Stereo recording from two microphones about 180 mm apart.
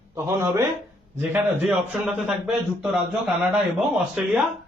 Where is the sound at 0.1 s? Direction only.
15° right (ahead or behind).